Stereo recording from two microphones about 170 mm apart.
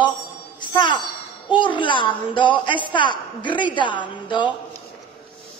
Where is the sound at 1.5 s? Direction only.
30° left (ahead or behind).